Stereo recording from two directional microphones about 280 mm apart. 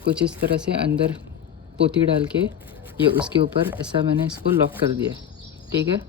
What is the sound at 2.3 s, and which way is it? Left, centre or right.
Speech, right.